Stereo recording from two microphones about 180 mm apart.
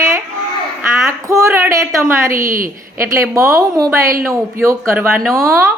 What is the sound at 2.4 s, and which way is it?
Speech, 50° right (ahead or behind).